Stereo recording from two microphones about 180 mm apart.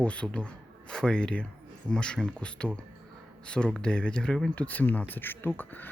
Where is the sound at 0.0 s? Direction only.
5° left (ahead or behind).